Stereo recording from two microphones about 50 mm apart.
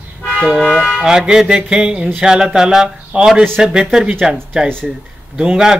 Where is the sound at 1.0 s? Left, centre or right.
Centre.